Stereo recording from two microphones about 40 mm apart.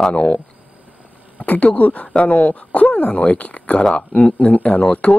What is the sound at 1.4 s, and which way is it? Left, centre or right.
Speech, left.